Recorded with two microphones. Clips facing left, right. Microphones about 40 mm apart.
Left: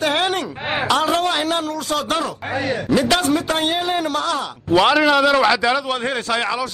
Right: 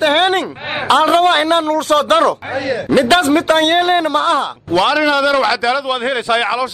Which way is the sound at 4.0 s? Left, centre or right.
Right.